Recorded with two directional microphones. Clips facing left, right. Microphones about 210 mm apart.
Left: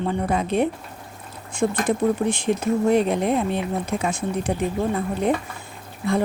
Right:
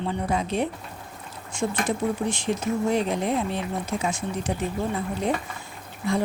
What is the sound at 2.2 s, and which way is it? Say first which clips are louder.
A woman's voice: left 4 dB; 55° left (ahead or behind).